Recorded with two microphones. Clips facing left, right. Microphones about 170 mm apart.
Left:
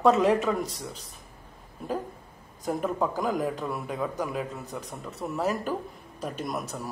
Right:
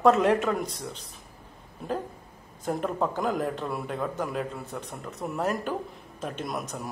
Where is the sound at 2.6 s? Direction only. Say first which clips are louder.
Even; centre (ahead or behind).